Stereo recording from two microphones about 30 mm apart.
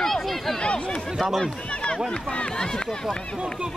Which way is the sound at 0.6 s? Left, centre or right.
Left.